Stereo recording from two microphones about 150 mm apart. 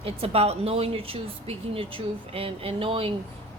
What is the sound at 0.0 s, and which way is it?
Speech, 40° right (ahead or behind).